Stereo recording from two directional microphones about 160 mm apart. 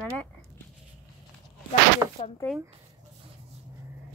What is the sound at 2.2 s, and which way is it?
Speech, 40° left (ahead or behind).